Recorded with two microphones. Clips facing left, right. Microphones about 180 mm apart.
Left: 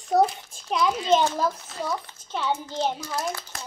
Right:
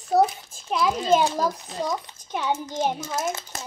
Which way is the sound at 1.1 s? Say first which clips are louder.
Right 1 dB; 10° right (ahead or behind).